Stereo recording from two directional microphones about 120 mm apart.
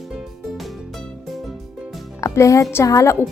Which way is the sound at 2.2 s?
25° left (ahead or behind).